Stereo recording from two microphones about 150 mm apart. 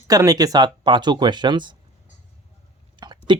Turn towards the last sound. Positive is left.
turn(degrees=-30)  # may be behind; listen again after turning